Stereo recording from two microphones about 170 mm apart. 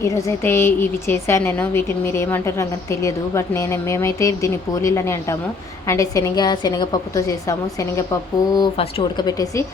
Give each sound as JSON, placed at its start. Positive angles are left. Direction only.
{"t": 0.0, "sound": "a woman's voice", "side_deg": 20}
{"t": 8.5, "sound": "a woman's voice", "side_deg": 30}